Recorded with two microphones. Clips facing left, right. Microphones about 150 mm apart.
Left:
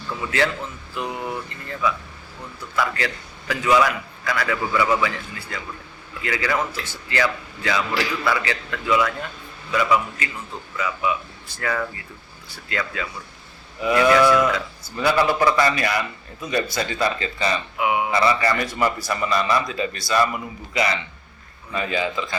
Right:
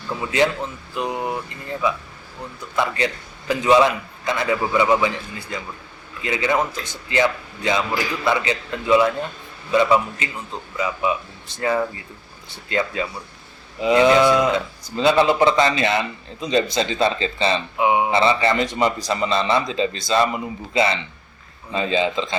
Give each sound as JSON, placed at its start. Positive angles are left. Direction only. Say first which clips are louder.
{"t": 0.1, "sound": "speech", "louder": "right 3 dB", "side_deg": -20}